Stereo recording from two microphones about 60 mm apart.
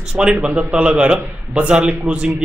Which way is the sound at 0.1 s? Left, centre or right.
Centre.